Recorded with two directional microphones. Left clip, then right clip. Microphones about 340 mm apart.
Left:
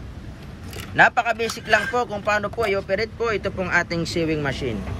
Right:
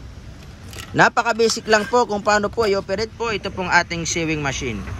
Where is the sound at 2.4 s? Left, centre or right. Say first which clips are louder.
Right 3 dB; centre.